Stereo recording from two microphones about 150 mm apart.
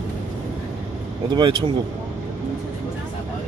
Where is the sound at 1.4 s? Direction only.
30° right (ahead or behind).